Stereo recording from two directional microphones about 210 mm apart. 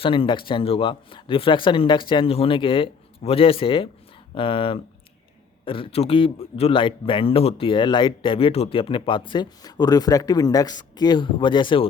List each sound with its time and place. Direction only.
0.0 s a man's voice: 25° left (ahead or behind)